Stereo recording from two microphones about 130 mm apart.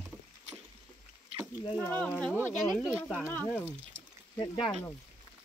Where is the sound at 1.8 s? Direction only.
10° left (ahead or behind).